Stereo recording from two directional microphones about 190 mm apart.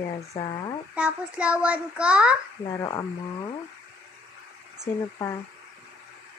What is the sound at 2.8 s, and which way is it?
Speech, 20° left (ahead or behind).